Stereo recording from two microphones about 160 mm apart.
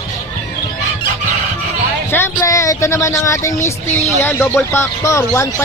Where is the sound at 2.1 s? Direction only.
15° left (ahead or behind).